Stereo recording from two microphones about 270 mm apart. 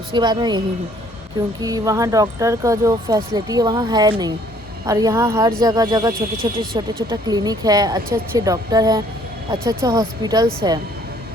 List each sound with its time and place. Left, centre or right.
0.1 s speech: centre
1.6 s speech: centre